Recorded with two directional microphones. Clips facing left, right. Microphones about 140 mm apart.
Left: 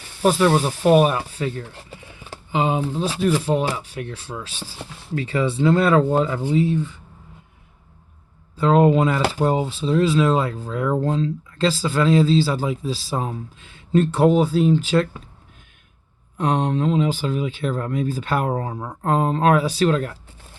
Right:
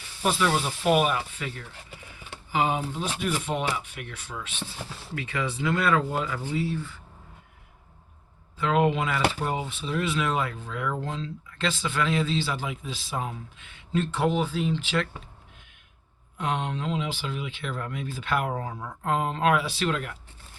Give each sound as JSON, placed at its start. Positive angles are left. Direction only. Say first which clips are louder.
{"t": 0.2, "sound": "speech", "louder": "left 8 dB", "side_deg": 45}
{"t": 6.4, "sound": "speech", "louder": "left 9 dB", "side_deg": 20}
{"t": 8.5, "sound": "speech", "louder": "left 8 dB", "side_deg": 35}
{"t": 16.4, "sound": "speech", "louder": "left 9 dB", "side_deg": 40}